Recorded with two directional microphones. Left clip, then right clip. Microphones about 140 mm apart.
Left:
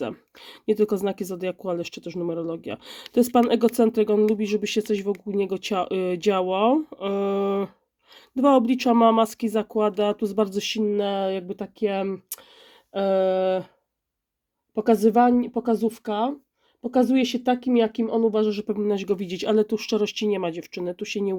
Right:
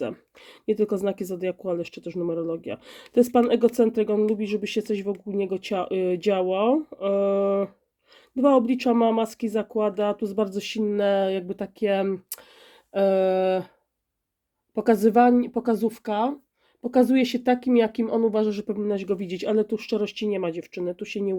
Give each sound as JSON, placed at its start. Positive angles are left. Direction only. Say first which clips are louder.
{"t": 0.0, "sound": "speech", "louder": "even", "side_deg": 25}
{"t": 10.9, "sound": "speech", "louder": "right 7 dB", "side_deg": 10}
{"t": 14.8, "sound": "speech", "louder": "even", "side_deg": 10}
{"t": 18.6, "sound": "speech", "louder": "left 2 dB", "side_deg": 30}